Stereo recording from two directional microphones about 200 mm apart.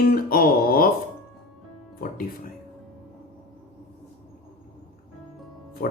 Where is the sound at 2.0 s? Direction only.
45° left (ahead or behind).